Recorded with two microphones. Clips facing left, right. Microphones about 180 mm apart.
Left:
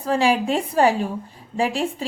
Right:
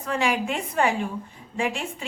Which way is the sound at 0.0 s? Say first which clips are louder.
Left 5 dB; 30° left (ahead or behind).